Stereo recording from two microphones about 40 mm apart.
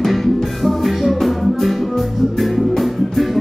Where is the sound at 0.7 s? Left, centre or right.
Centre.